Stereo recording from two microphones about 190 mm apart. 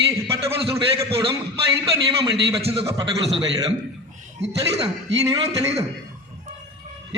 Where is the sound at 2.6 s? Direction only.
30° right (ahead or behind).